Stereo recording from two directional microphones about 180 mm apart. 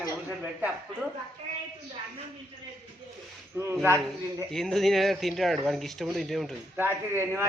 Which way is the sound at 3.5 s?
15° right (ahead or behind).